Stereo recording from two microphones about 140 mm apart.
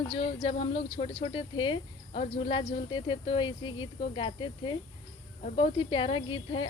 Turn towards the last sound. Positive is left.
turn(degrees=35)  # may be behind; listen again after turning